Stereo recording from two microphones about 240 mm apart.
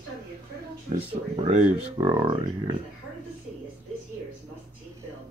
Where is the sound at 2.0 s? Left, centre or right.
Centre.